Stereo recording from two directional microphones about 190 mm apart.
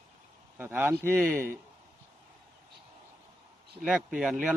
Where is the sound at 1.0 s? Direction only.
10° left (ahead or behind).